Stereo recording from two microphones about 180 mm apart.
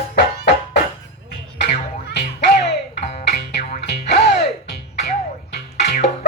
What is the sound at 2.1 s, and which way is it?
Music, 70° left (ahead or behind).